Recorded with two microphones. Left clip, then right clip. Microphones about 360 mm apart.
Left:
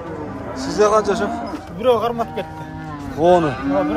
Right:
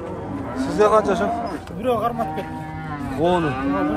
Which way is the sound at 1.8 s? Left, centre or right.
Centre.